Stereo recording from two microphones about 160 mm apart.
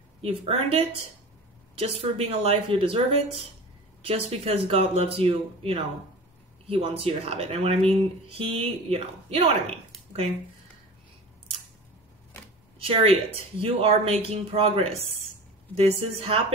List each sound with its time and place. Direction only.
0.2 s speech: 35° right (ahead or behind)
12.7 s speech: 35° right (ahead or behind)
16.0 s speech: 35° right (ahead or behind)